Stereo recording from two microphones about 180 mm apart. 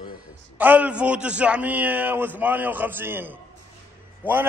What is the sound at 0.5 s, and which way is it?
A man's voice, 10° right (ahead or behind).